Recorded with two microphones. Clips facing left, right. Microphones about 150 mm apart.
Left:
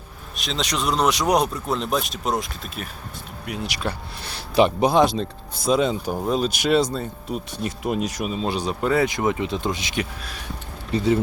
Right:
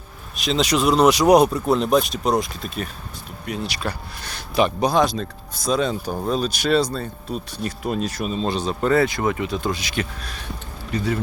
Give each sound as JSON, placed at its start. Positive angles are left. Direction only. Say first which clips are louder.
{"t": 0.3, "sound": "speech", "louder": "right 6 dB", "side_deg": 0}
{"t": 4.2, "sound": "speech", "louder": "left 2 dB", "side_deg": 25}